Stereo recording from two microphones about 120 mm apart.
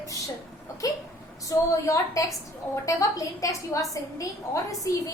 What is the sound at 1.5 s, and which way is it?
A woman's voice, 25° left (ahead or behind).